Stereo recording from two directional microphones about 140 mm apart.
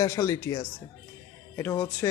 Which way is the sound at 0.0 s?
20° left (ahead or behind).